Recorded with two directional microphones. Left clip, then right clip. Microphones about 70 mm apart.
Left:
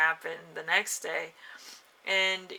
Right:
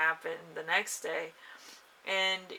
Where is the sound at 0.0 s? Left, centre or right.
Left.